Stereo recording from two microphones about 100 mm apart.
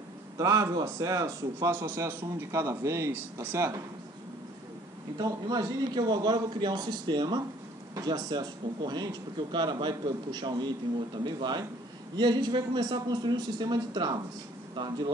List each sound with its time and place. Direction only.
0.4 s a man's voice: 35° right (ahead or behind)
5.1 s speech: 40° right (ahead or behind)
12.2 s speech: 45° right (ahead or behind)